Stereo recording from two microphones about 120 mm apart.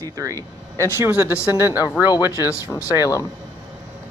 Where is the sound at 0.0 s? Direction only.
25° right (ahead or behind).